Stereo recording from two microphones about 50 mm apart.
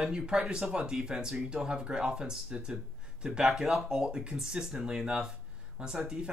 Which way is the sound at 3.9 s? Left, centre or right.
Centre.